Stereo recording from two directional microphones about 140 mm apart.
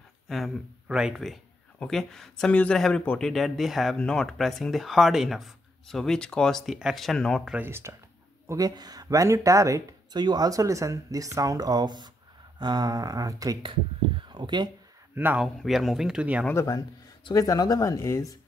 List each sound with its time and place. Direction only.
0.3 s speech: 5° right (ahead or behind)
7.5 s speech: 15° right (ahead or behind)
8.5 s speech: 25° right (ahead or behind)
15.1 s speech: 10° right (ahead or behind)
15.4 s speech: centre (ahead or behind)
16.4 s speech: 20° left (ahead or behind)